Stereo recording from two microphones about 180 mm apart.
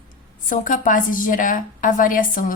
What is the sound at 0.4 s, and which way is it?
A woman's voice, 45° left (ahead or behind).